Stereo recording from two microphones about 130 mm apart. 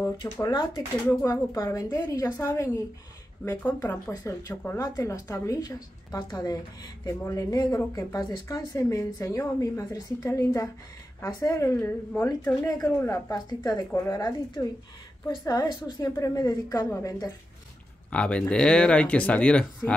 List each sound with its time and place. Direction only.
0.2 s speech: 35° left (ahead or behind)
18.1 s speech: 10° left (ahead or behind)